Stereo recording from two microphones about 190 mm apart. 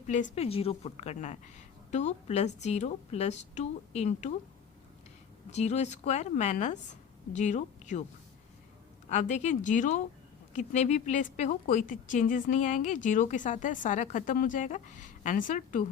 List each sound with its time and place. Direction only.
0.1 s a woman's voice: 35° left (ahead or behind)
5.5 s a woman's voice: 35° left (ahead or behind)
9.0 s a woman's voice: 40° left (ahead or behind)